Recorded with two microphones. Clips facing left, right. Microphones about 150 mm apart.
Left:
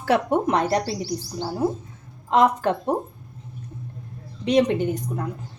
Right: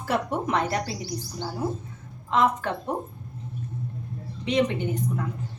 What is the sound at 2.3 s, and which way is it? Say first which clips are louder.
Speech: left 5 dB; 35° left (ahead or behind).